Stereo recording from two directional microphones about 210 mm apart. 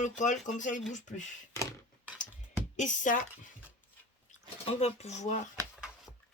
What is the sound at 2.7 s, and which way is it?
Speech, 35° left (ahead or behind).